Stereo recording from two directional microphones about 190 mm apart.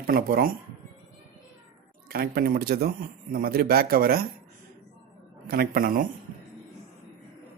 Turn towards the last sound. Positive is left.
turn(degrees=-50)  # may be behind; listen again after turning